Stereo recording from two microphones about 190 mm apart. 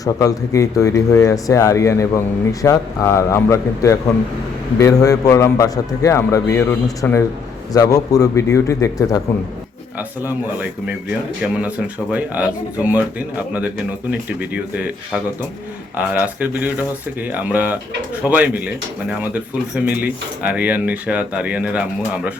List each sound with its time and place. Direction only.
0.0 s speech: 20° left (ahead or behind)
10.2 s speech: 10° right (ahead or behind)
12.1 s speech: 5° right (ahead or behind)